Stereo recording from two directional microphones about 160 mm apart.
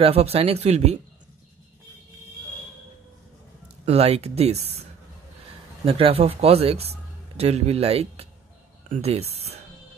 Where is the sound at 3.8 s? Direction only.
40° right (ahead or behind).